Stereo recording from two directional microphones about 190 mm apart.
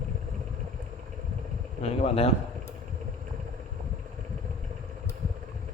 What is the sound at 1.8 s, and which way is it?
Speech, 30° left (ahead or behind).